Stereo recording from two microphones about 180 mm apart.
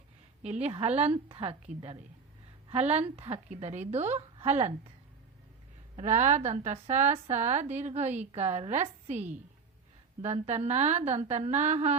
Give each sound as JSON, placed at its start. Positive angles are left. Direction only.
{"t": 0.4, "sound": "a woman's voice", "side_deg": -35}
{"t": 6.0, "sound": "a woman's voice", "side_deg": -40}